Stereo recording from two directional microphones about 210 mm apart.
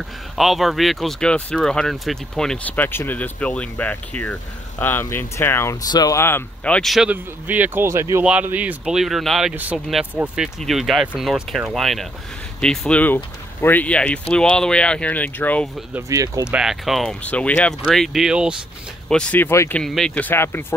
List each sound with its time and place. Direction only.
0.4 s speech: centre (ahead or behind)
15.9 s speech: 15° right (ahead or behind)
16.4 s speech: 5° right (ahead or behind)